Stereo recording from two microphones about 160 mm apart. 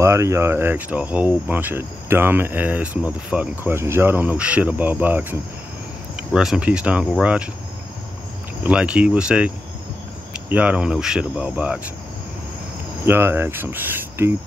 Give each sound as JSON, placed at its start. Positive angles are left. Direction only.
{"t": 0.0, "sound": "speech", "side_deg": -15}
{"t": 8.6, "sound": "speech", "side_deg": -5}
{"t": 13.0, "sound": "speech", "side_deg": -15}